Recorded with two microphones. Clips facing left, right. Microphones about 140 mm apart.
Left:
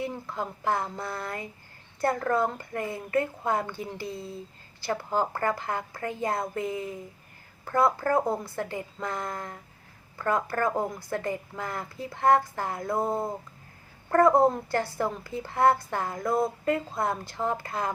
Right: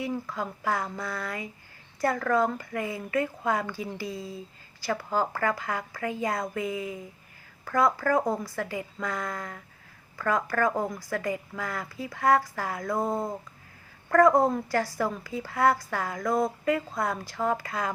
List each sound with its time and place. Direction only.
0.0 s a woman's voice: 25° left (ahead or behind)
4.0 s speech: 15° right (ahead or behind)
4.9 s a woman's voice: 20° left (ahead or behind)